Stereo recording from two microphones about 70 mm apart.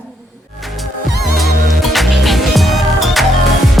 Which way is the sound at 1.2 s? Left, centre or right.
Centre.